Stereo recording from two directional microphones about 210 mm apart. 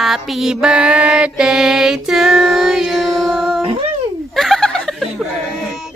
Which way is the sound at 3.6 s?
25° right (ahead or behind).